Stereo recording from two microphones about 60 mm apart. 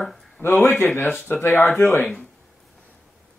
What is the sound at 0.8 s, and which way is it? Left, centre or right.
Speech, left.